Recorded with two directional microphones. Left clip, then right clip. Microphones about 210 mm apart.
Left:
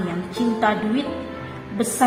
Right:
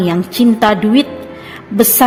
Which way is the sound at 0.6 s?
50° right (ahead or behind).